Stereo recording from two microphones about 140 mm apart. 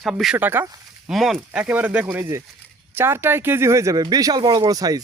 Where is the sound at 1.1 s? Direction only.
Centre (ahead or behind).